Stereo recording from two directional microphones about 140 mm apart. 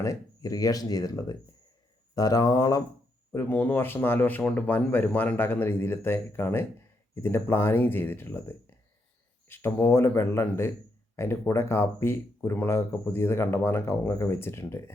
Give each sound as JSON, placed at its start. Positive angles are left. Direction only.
{"t": 0.0, "sound": "speech", "side_deg": 25}
{"t": 3.3, "sound": "speech", "side_deg": 15}